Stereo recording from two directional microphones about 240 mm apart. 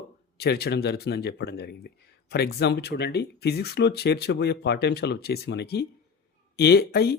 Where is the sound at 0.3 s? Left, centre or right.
Left.